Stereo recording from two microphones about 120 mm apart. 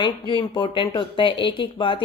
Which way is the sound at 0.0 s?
40° left (ahead or behind).